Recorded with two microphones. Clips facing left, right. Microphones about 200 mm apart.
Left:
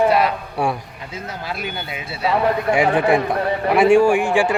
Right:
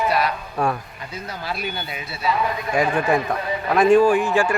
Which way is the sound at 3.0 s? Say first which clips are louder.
Left 4 dB; 15° left (ahead or behind).